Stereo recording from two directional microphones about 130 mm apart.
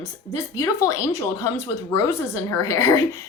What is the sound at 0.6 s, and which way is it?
Speech, 25° left (ahead or behind).